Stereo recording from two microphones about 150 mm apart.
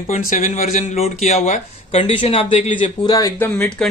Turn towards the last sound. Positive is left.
turn(degrees=10)  # may be behind; listen again after turning